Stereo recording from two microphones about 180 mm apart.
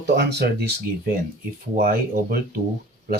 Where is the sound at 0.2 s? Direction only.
65° right (ahead or behind).